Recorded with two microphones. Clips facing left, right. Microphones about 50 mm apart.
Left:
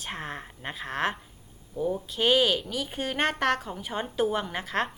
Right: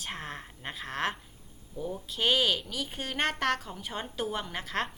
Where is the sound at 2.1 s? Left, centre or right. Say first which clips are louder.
Left 3 dB; centre.